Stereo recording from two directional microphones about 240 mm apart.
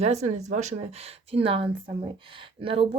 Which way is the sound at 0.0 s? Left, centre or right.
Right.